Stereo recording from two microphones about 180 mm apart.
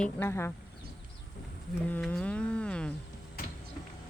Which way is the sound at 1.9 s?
5° left (ahead or behind).